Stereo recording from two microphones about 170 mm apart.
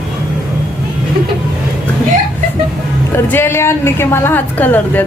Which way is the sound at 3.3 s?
15° left (ahead or behind).